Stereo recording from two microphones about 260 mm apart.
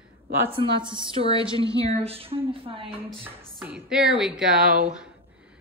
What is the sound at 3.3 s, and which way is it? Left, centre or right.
Speech, centre.